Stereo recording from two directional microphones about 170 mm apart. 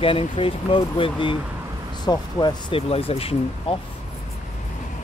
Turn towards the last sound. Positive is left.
turn(degrees=35)  # may be behind; listen again after turning